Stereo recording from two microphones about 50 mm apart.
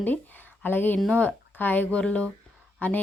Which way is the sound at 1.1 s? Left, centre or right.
Left.